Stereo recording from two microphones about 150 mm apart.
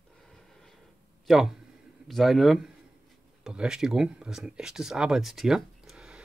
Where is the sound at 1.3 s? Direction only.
Centre (ahead or behind).